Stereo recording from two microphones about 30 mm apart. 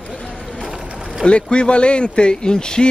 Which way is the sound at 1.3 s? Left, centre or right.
Left.